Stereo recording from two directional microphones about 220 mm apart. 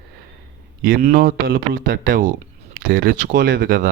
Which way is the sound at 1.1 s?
40° right (ahead or behind).